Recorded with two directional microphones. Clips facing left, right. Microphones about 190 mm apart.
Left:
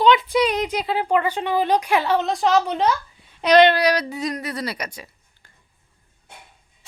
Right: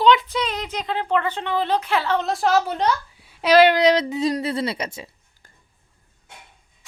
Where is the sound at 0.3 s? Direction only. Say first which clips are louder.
Left 6 dB; 10° left (ahead or behind).